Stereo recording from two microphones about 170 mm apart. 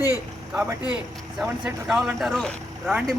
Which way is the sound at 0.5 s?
10° right (ahead or behind).